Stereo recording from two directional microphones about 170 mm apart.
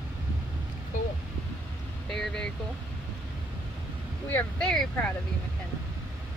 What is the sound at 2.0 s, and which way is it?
Vehicle, 5° left (ahead or behind).